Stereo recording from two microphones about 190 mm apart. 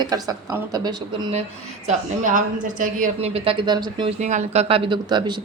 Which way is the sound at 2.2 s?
40° right (ahead or behind).